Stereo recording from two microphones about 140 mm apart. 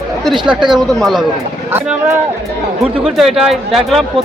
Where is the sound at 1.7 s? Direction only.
15° right (ahead or behind).